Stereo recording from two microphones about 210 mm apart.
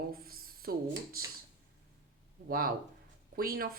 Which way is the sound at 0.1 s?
45° right (ahead or behind).